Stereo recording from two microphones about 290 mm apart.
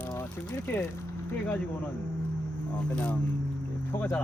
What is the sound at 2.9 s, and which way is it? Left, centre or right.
Speech, centre.